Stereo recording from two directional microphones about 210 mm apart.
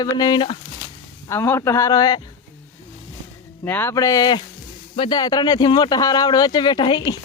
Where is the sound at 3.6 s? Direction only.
10° left (ahead or behind).